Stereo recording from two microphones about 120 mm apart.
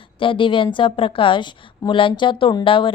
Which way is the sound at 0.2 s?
45° left (ahead or behind).